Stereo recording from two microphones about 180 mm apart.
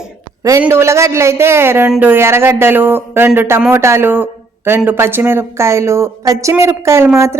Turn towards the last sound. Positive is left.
turn(degrees=-15)  # may be behind; listen again after turning